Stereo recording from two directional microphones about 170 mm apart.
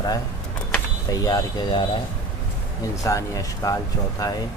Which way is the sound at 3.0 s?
20° left (ahead or behind).